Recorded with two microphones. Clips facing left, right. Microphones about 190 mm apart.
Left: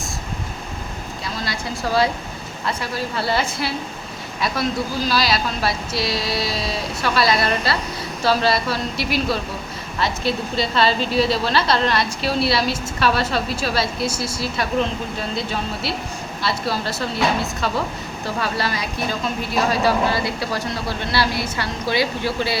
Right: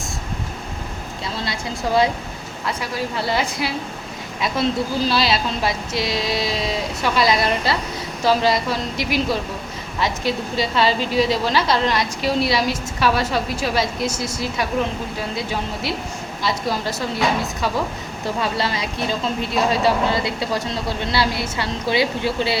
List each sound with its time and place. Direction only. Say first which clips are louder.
1.4 s a woman's voice: even; 20° right (ahead or behind)
18.3 s speech: right 1 dB; 25° right (ahead or behind)